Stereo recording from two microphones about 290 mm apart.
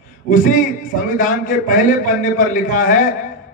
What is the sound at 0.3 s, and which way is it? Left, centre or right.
A man's voice, left.